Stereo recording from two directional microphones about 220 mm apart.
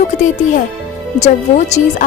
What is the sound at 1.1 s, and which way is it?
Speech, 30° left (ahead or behind).